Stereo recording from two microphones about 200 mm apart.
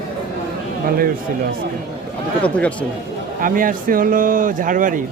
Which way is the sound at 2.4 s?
5° left (ahead or behind).